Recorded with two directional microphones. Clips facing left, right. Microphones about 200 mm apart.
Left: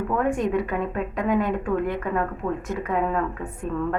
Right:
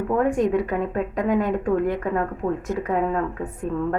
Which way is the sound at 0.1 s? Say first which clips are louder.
Right 4 dB; 35° right (ahead or behind).